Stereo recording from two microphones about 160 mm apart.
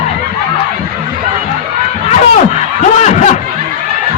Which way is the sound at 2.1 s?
45° left (ahead or behind).